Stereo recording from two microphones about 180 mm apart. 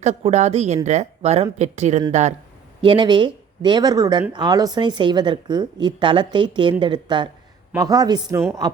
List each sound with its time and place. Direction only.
0.0 s speech: 35° right (ahead or behind)
2.8 s a woman's voice: 25° right (ahead or behind)